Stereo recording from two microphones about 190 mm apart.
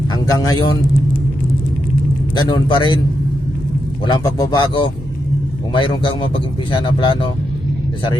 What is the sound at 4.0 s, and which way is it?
Speech, 20° left (ahead or behind).